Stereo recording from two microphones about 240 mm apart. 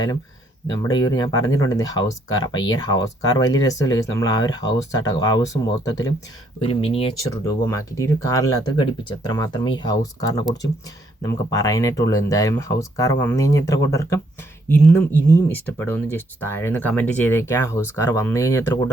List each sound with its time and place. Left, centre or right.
0.7 s speech: centre
7.4 s speech: centre